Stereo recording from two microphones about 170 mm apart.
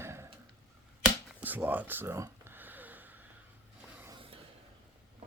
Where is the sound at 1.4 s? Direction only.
10° right (ahead or behind).